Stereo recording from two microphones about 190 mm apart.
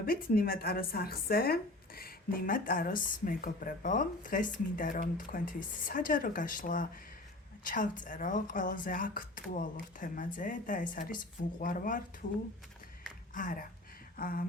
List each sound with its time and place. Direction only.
0.0 s speech: 50° left (ahead or behind)